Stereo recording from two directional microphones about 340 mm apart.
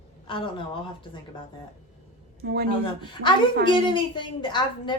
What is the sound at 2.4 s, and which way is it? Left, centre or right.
Speech, right.